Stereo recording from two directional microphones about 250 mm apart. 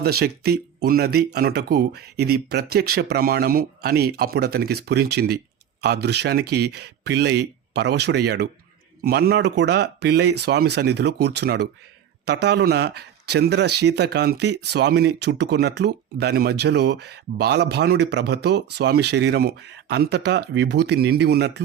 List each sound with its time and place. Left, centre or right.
0.0 s speech: right